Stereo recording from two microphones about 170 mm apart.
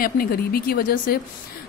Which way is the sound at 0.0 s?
60° left (ahead or behind).